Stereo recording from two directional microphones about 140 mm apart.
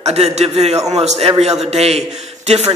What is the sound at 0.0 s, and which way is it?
A man's voice, 50° right (ahead or behind).